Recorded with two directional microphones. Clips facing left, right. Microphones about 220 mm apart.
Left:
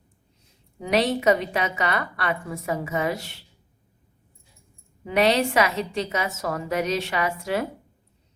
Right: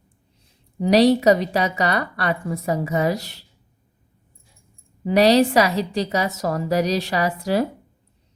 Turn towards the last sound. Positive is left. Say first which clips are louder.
# right 4 dB
turn(degrees=-35)  # may be behind; listen again after turning